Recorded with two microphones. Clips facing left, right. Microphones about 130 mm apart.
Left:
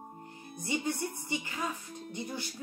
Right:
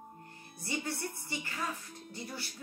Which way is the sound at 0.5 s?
15° left (ahead or behind).